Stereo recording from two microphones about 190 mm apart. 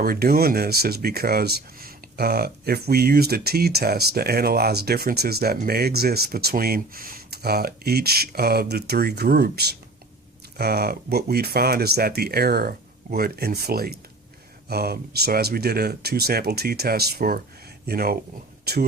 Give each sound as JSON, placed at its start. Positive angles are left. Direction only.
{"t": 0.0, "sound": "speech", "side_deg": -55}